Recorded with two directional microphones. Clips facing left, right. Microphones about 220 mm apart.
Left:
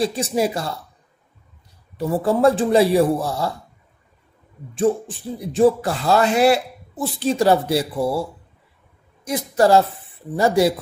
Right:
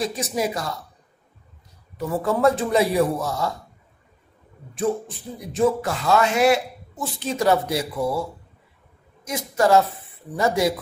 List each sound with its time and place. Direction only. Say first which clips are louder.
0.0 s speech: left 4 dB; 30° left (ahead or behind)
2.0 s a woman's voice: left 4 dB; 30° left (ahead or behind)
5.5 s a woman's voice: left 4 dB; 30° left (ahead or behind)